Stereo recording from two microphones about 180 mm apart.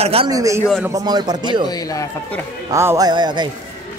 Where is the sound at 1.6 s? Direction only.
20° left (ahead or behind).